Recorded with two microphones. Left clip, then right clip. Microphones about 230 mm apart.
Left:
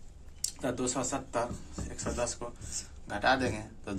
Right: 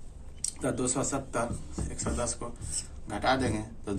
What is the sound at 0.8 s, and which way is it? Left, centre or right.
Speech, centre.